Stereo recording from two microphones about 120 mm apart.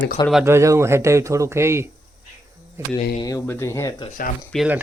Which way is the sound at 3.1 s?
30° left (ahead or behind).